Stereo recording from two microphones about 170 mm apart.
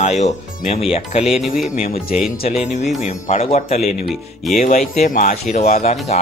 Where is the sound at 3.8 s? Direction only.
Centre (ahead or behind).